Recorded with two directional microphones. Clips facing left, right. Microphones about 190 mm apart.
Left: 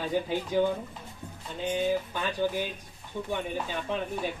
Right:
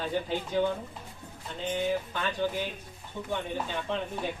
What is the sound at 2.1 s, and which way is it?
Speech, 10° left (ahead or behind).